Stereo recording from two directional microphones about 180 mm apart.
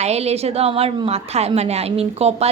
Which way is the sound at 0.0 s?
35° right (ahead or behind).